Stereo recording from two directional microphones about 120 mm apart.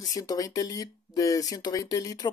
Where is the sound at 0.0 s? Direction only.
30° left (ahead or behind).